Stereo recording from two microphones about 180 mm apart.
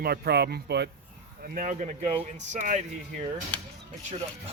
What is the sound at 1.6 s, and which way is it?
Speech, 45° right (ahead or behind).